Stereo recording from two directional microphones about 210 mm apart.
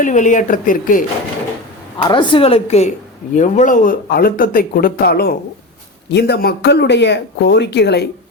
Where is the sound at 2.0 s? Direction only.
25° left (ahead or behind).